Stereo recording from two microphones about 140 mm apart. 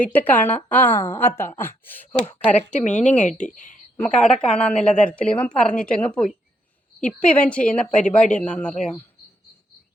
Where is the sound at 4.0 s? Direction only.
5° left (ahead or behind).